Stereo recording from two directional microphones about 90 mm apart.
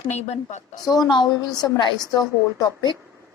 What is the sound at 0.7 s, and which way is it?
A woman's voice, 45° left (ahead or behind).